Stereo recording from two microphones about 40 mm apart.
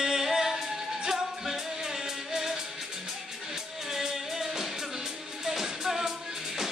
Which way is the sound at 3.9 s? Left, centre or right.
Centre.